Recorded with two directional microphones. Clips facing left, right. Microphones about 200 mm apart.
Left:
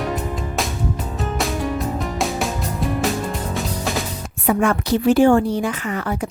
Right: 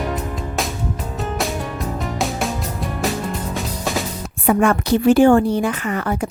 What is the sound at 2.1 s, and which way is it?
Music, centre (ahead or behind).